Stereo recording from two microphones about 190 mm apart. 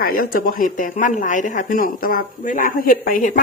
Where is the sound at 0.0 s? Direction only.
50° left (ahead or behind).